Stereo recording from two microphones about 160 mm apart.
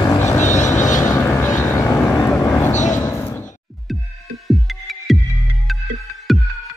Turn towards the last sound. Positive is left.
turn(degrees=0)  # may be behind; listen again after turning